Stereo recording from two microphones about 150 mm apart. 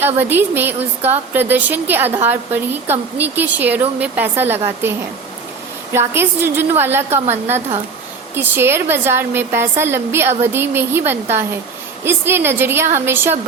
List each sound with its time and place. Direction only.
0.0 s a woman's voice: 15° right (ahead or behind)
6.1 s a woman's voice: 15° right (ahead or behind)